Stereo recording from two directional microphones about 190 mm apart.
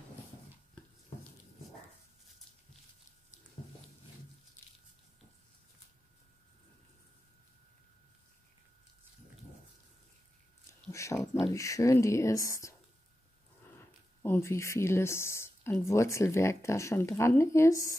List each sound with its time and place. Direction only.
10.7 s speech: 15° left (ahead or behind)